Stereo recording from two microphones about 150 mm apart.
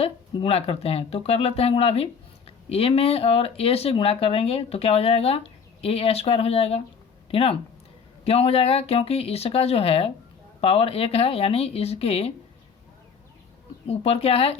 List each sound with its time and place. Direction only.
0.0 s speech: 40° left (ahead or behind)
13.8 s speech: 45° left (ahead or behind)